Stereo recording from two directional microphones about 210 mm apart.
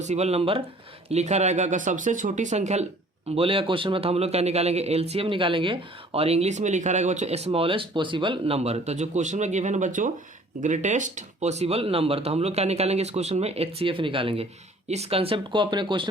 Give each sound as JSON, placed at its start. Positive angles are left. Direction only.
{"t": 0.0, "sound": "a man's voice", "side_deg": -30}